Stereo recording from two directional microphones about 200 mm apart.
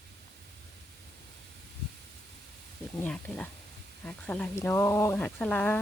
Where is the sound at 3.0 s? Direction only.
5° left (ahead or behind).